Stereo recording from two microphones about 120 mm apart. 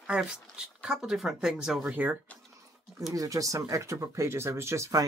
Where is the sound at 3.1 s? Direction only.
30° right (ahead or behind).